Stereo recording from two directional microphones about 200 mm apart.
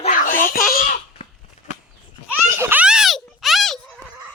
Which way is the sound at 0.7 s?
40° left (ahead or behind).